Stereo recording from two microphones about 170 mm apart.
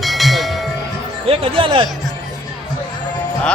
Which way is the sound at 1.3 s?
30° right (ahead or behind).